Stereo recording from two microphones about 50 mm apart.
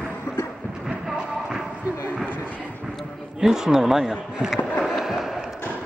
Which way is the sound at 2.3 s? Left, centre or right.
Left.